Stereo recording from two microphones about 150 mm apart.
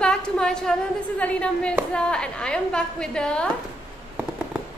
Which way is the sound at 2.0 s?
5° left (ahead or behind).